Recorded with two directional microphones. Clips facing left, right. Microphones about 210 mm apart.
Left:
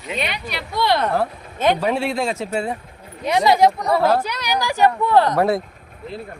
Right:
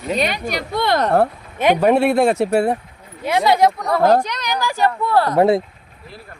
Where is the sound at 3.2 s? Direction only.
Centre (ahead or behind).